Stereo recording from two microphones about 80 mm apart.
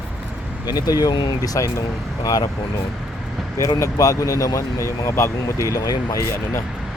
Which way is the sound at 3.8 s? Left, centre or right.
Left.